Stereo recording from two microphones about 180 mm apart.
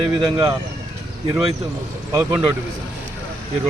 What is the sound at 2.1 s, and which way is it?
Speech, 20° right (ahead or behind).